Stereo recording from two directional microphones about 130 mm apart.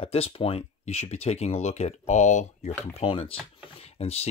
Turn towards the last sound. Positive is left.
turn(degrees=50)  # may be behind; listen again after turning